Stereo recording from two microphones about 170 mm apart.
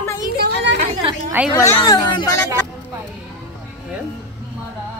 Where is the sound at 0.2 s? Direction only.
65° right (ahead or behind).